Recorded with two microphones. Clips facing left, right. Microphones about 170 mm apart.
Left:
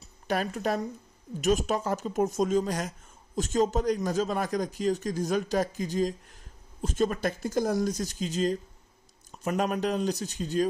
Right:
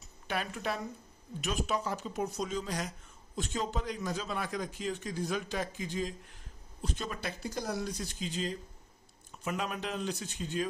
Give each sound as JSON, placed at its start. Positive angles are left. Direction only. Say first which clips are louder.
{"t": 0.0, "sound": "speech", "louder": "left 7 dB", "side_deg": 40}